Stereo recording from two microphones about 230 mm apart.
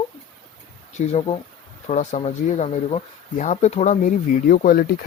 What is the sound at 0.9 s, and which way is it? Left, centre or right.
Speech, left.